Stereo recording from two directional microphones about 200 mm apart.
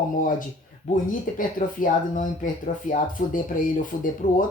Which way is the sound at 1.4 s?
40° left (ahead or behind).